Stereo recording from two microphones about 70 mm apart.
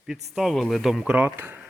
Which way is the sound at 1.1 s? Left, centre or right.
Right.